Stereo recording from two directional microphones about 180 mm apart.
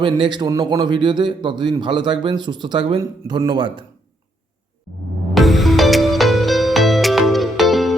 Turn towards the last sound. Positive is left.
turn(degrees=0)  # may be behind; listen again after turning